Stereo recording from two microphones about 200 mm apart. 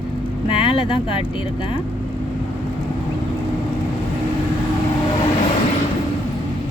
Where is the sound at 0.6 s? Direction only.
25° left (ahead or behind).